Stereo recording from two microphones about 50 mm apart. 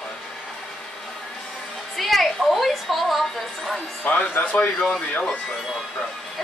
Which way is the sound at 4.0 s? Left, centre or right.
Left.